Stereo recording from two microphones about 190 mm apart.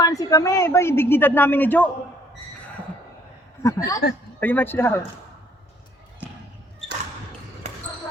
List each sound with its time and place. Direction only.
0.0 s speech: 20° left (ahead or behind)
3.6 s speech: 15° left (ahead or behind)
6.2 s basketball bounce: 10° right (ahead or behind)
7.6 s basketball bounce: 40° right (ahead or behind)